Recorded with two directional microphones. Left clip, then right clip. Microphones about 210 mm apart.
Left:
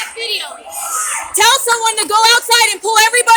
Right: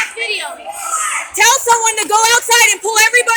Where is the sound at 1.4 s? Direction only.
Centre (ahead or behind).